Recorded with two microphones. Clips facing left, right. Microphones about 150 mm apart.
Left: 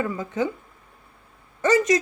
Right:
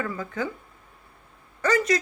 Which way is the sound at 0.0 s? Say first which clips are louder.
Left 4 dB; 20° left (ahead or behind).